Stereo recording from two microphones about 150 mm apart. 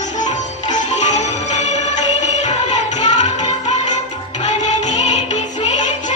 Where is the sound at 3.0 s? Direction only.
55° left (ahead or behind).